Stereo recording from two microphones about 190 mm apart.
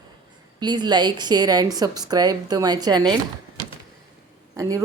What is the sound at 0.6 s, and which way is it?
Speech, 20° right (ahead or behind).